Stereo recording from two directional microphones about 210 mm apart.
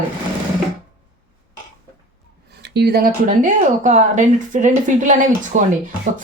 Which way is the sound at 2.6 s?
50° right (ahead or behind).